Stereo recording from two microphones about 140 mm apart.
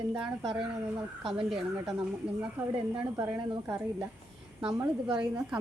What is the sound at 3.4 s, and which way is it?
Speech, 35° right (ahead or behind).